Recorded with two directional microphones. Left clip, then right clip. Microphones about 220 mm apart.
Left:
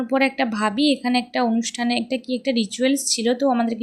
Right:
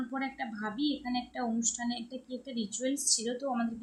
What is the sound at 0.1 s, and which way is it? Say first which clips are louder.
A woman's voice: left 16 dB; 30° left (ahead or behind).